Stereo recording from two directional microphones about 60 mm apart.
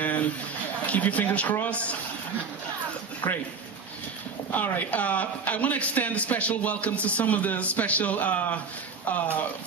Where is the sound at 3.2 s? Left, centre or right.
Left.